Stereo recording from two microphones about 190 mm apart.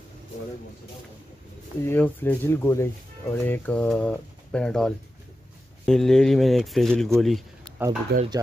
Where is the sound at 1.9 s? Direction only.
10° left (ahead or behind).